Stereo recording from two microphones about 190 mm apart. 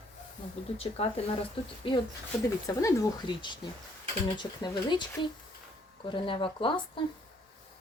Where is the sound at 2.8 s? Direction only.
20° left (ahead or behind).